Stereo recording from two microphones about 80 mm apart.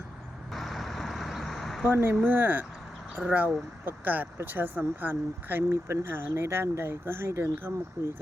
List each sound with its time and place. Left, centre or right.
0.5 s vehicle: centre
1.9 s speech: right
5.7 s speech: right